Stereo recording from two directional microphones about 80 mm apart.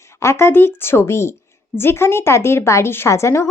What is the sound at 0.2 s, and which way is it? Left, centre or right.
A woman's voice, left.